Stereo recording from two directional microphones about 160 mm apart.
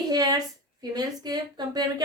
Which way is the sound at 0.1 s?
25° right (ahead or behind).